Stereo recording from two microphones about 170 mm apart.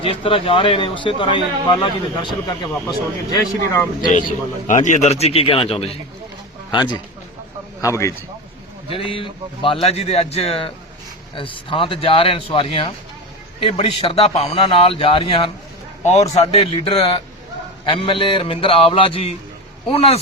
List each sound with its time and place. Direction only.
0.0 s a man's voice: 35° left (ahead or behind)
4.1 s a man's voice: 50° left (ahead or behind)
7.8 s a man's voice: 15° left (ahead or behind)
8.9 s speech: 30° left (ahead or behind)